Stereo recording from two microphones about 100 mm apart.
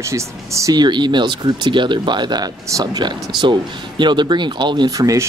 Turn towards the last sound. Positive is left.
turn(degrees=-35)  # may be behind; listen again after turning